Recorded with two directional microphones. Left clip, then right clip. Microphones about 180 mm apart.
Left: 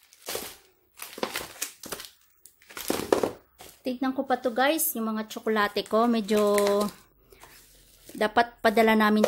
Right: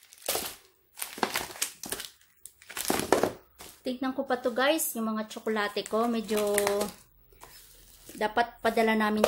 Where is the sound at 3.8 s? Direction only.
35° left (ahead or behind); by 6.8 s 50° left (ahead or behind).